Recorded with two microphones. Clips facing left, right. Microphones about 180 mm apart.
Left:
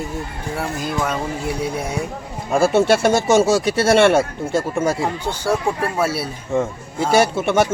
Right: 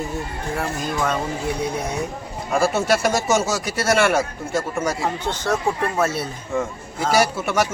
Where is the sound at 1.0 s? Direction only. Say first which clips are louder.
Even; 10° left (ahead or behind).